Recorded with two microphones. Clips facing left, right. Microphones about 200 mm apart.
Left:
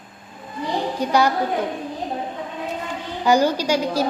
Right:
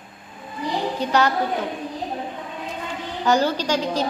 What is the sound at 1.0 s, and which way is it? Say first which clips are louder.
Speech: left 2 dB; 10° left (ahead or behind).